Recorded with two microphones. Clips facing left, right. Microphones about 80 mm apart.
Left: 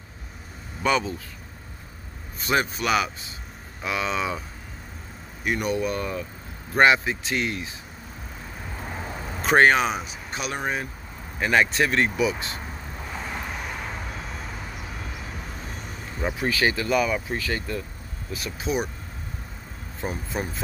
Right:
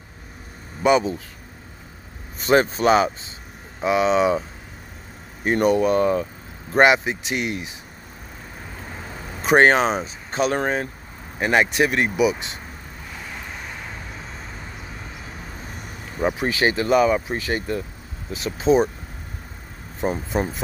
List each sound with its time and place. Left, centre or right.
0.8 s speech: centre
2.4 s speech: right
5.4 s speech: right
6.7 s speech: right
8.8 s a sound: centre
9.6 s speech: right
11.3 s speech: right
13.1 s vehicle: centre
16.2 s speech: right
20.2 s speech: right